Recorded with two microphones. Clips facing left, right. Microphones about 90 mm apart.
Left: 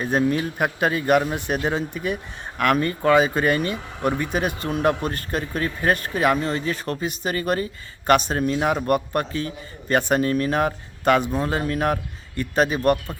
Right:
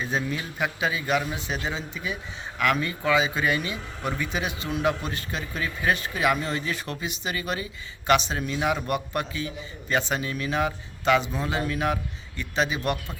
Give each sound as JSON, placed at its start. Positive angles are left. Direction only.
{"t": 0.0, "sound": "speech", "side_deg": 50}